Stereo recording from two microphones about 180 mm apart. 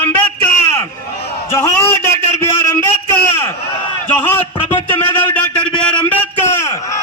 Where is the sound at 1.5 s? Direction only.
15° left (ahead or behind).